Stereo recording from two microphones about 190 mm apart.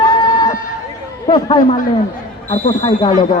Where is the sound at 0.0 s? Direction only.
20° left (ahead or behind).